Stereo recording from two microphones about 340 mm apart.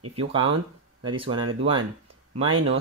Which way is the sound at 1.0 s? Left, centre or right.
Centre.